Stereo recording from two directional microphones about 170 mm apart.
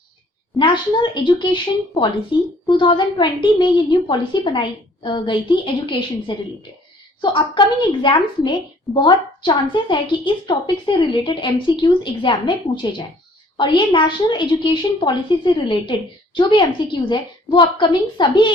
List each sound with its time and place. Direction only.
0.6 s a woman's voice: 30° left (ahead or behind)